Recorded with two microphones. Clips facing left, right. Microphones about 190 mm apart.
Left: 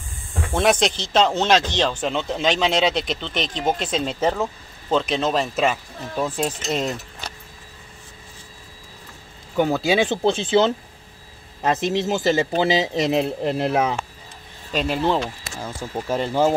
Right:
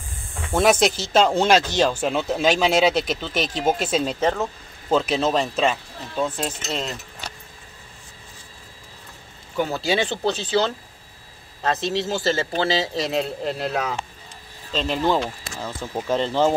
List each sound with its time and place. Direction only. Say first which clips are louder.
0.5 s speech: right 1 dB; 5° right (ahead or behind)
4.2 s speech: left 3 dB; 5° left (ahead or behind)
4.8 s speech: right 1 dB; 5° right (ahead or behind); by 6.9 s 15° left (ahead or behind)
9.6 s speech: left 4 dB; 15° left (ahead or behind)
14.7 s speech: left 2 dB; 10° left (ahead or behind)
16.1 s speech: even; 10° left (ahead or behind)